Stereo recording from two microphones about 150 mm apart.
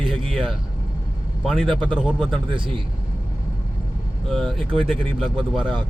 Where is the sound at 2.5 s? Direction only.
35° right (ahead or behind).